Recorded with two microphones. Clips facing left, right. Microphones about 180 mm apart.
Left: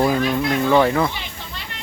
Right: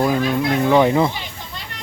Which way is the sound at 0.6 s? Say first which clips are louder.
Right 2 dB; 15° right (ahead or behind).